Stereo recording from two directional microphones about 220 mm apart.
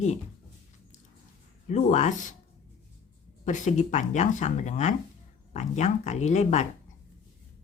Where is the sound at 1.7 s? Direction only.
35° left (ahead or behind).